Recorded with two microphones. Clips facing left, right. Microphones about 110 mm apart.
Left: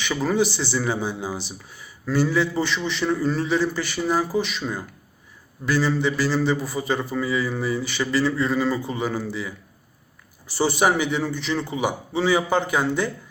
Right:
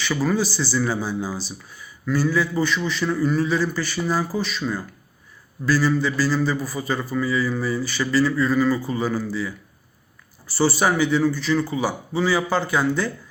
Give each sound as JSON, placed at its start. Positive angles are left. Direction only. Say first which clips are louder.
{"t": 0.0, "sound": "a man's voice", "louder": "even", "side_deg": 20}
{"t": 5.6, "sound": "a man's voice", "louder": "right 1 dB", "side_deg": 25}